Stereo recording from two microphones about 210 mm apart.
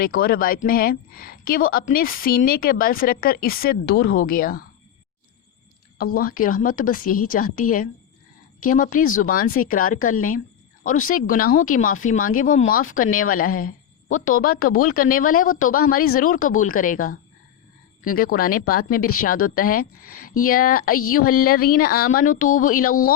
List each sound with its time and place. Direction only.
0.0 s a woman's voice: 45° left (ahead or behind)
6.0 s a woman's voice: 45° left (ahead or behind)